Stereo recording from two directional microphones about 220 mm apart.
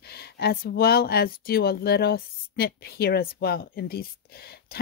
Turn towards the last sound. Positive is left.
turn(degrees=45)  # may be behind; listen again after turning